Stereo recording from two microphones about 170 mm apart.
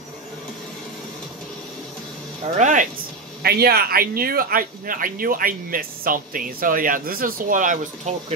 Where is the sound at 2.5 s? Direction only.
45° right (ahead or behind).